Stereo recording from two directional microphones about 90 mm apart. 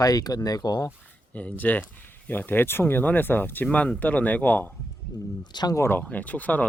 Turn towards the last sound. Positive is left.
turn(degrees=15)  # may be behind; listen again after turning